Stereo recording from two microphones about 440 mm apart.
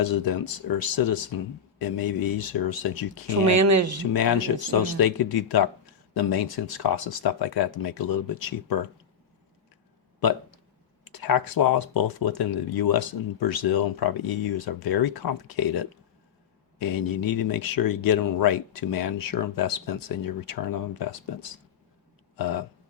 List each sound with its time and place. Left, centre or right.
0.0 s speech: left
3.4 s speech: right
4.1 s speech: left
11.0 s speech: left
22.4 s burping: left